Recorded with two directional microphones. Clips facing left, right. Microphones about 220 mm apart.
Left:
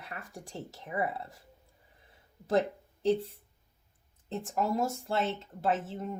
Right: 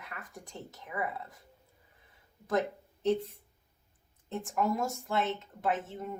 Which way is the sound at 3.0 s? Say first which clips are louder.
Left 1 dB; 30° left (ahead or behind).